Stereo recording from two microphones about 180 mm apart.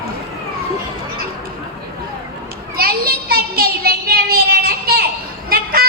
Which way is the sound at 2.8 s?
60° right (ahead or behind).